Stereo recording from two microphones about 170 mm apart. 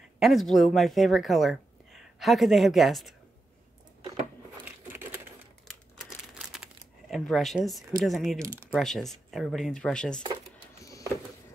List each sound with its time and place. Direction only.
0.2 s speech: centre (ahead or behind)
4.6 s crumpling: 15° right (ahead or behind)
5.7 s crumpling: centre (ahead or behind)
8.0 s speech: centre (ahead or behind)
10.8 s a sound: 20° left (ahead or behind)